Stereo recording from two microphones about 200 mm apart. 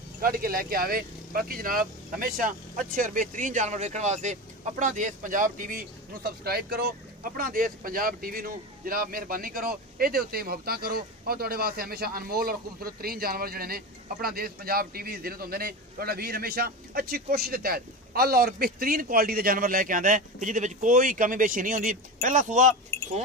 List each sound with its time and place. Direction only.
0.2 s speech: 45° right (ahead or behind)